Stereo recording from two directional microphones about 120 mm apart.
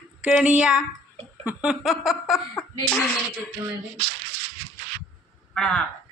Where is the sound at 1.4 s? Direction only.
5° right (ahead or behind).